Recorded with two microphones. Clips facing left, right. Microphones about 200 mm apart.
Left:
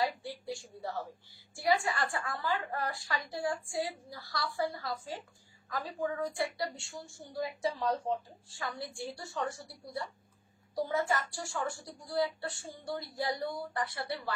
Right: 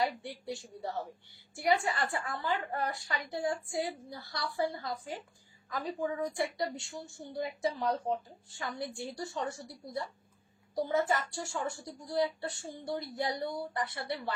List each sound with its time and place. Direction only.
0.0 s a woman's voice: 20° right (ahead or behind)
10.7 s a woman's voice: 25° right (ahead or behind)